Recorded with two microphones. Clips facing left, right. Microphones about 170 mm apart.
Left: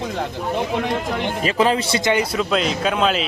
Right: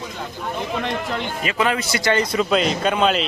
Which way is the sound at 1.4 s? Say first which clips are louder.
Left 4 dB; 35° left (ahead or behind).